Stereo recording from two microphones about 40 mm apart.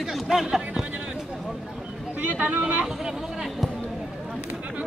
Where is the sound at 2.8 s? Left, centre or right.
Centre.